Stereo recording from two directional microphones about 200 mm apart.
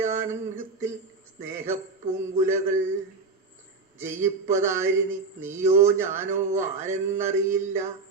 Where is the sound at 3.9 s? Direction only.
10° right (ahead or behind).